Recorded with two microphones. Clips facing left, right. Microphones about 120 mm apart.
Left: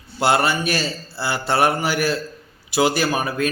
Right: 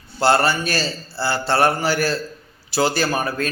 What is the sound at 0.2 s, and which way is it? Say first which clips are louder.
A man's voice: right 1 dB; 15° left (ahead or behind).